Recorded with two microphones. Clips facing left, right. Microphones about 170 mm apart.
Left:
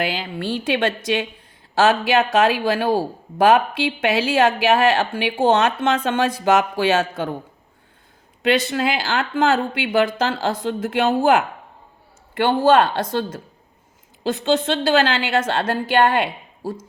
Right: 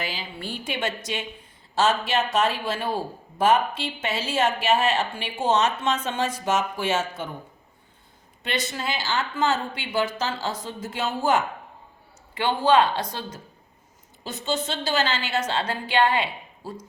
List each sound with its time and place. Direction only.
0.1 s speech: 75° left (ahead or behind)
5.5 s speech: 60° left (ahead or behind)
8.4 s speech: 70° left (ahead or behind)
12.4 s speech: 45° left (ahead or behind)
14.4 s speech: 65° left (ahead or behind)